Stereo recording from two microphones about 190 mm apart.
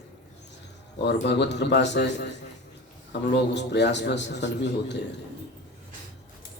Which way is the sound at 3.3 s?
65° left (ahead or behind).